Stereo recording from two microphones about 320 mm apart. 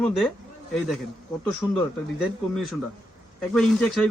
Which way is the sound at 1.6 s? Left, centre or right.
Centre.